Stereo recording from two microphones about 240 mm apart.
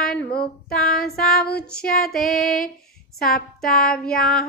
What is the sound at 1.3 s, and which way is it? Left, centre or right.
Speech, left.